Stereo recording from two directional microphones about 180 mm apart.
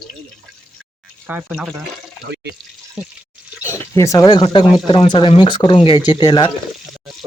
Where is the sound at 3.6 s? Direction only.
15° left (ahead or behind).